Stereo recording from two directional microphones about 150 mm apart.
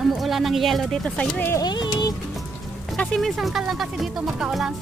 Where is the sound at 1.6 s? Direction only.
30° left (ahead or behind).